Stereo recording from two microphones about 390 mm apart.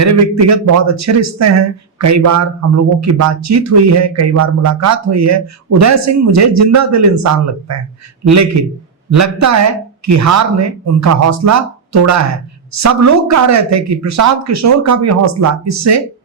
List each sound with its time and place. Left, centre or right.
0.0 s speech: right
9.0 s speech: right